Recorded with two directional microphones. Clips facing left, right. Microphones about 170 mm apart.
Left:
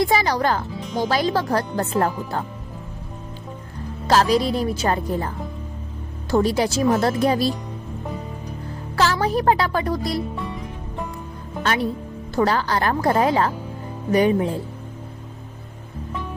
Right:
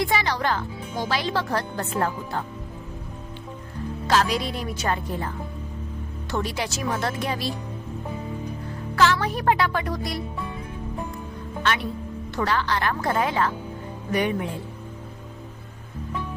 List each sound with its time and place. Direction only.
0.0 s speech: 40° left (ahead or behind)
4.0 s speech: 35° left (ahead or behind)
6.3 s speech: 40° left (ahead or behind)
9.0 s speech: 35° left (ahead or behind)
11.6 s speech: 40° left (ahead or behind)